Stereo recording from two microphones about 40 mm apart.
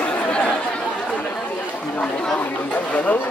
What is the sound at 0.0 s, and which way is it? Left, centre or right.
Chatter, left.